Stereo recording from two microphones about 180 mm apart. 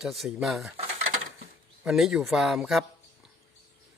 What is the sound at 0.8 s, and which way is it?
Dishes, 35° right (ahead or behind).